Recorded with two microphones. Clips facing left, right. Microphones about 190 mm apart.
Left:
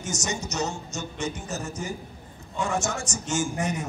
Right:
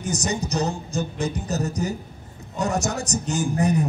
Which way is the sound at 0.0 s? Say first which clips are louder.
Right 5 dB; 35° right (ahead or behind).